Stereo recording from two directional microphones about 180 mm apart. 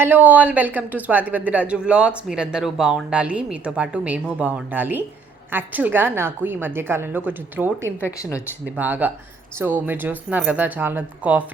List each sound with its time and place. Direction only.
0.0 s speech: 10° right (ahead or behind)
8.0 s speech: 15° left (ahead or behind)
8.6 s speech: 10° right (ahead or behind)